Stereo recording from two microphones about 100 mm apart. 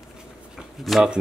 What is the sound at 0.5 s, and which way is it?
Speech, centre (ahead or behind).